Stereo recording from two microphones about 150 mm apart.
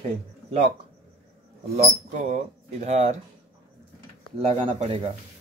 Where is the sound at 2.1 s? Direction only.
55° right (ahead or behind).